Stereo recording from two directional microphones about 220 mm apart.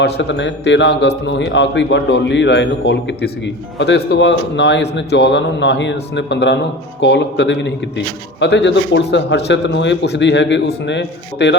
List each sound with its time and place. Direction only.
0.0 s a man's voice: 55° left (ahead or behind)